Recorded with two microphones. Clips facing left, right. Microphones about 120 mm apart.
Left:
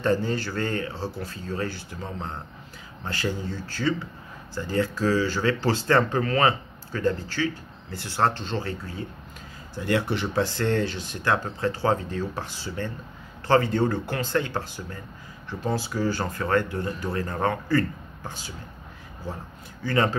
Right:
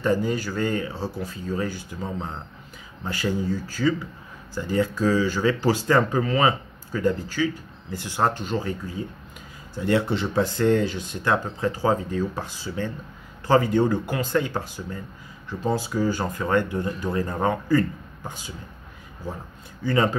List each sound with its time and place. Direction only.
0.0 s speech: 15° right (ahead or behind)
19.8 s speech: 20° right (ahead or behind)